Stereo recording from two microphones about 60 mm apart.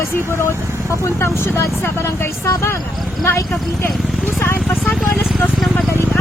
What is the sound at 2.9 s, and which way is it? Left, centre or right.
Speech, centre.